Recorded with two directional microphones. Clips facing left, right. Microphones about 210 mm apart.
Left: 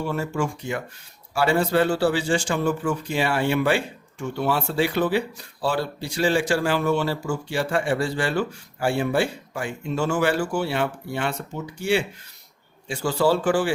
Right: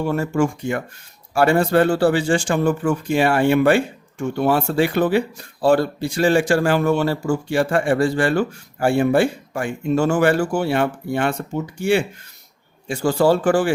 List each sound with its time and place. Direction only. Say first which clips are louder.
0.1 s speech: right 6 dB; 50° right (ahead or behind)